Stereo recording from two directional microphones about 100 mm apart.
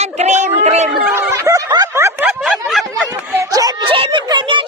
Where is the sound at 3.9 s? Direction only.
60° right (ahead or behind).